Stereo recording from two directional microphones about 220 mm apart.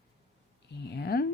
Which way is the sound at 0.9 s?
45° left (ahead or behind).